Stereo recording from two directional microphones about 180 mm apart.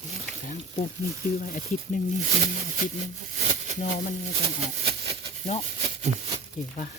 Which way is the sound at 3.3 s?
40° right (ahead or behind).